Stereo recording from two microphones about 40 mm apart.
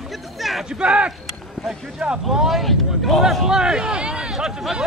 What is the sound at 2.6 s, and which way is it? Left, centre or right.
Speech, centre.